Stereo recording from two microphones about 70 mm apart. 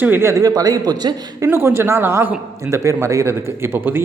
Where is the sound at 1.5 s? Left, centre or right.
Right.